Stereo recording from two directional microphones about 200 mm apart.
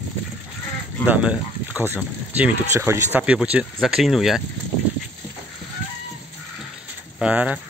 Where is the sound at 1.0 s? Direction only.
5° right (ahead or behind).